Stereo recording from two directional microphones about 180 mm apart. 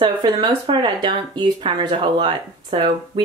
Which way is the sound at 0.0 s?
25° right (ahead or behind).